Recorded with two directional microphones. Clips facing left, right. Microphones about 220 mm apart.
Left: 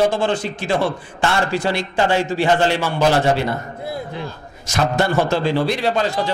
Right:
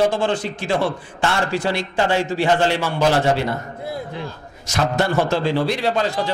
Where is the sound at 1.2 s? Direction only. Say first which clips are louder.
Left 2 dB; 15° left (ahead or behind).